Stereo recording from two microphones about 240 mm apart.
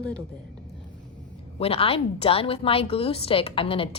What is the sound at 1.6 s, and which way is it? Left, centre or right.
A woman's voice, left.